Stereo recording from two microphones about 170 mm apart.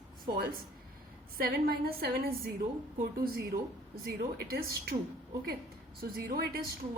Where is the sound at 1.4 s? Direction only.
60° right (ahead or behind).